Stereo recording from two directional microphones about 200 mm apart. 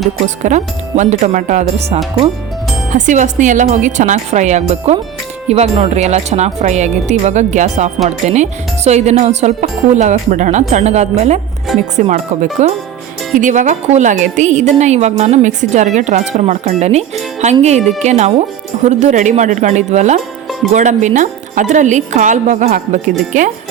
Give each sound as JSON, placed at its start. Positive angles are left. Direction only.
{"t": 0.4, "sound": "speech", "side_deg": -35}